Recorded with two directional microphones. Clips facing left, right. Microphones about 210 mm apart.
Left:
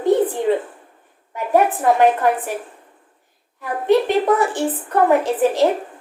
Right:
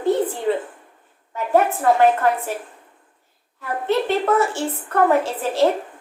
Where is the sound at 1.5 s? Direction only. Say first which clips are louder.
Left 1 dB; 15° left (ahead or behind).